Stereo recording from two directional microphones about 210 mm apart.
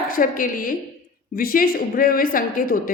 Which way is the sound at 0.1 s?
40° left (ahead or behind).